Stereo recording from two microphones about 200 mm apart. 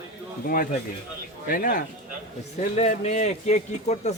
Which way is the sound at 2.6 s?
30° left (ahead or behind).